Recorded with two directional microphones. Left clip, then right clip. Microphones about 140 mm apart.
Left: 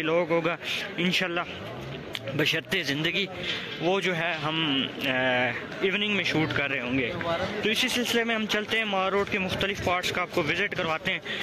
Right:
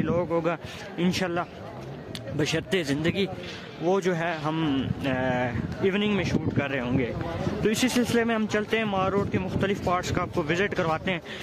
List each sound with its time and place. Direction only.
0.0 s speech: 25° right (ahead or behind)
2.3 s speech: 20° right (ahead or behind); by 5.1 s 35° right (ahead or behind)
5.1 s speech: 25° right (ahead or behind)
7.6 s speech: 50° right (ahead or behind); by 11.1 s 30° right (ahead or behind)